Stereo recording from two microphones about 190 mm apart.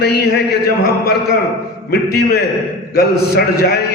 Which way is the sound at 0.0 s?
55° left (ahead or behind).